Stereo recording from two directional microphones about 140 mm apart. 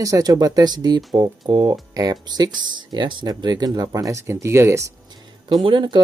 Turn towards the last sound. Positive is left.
turn(degrees=-35)  # may be behind; listen again after turning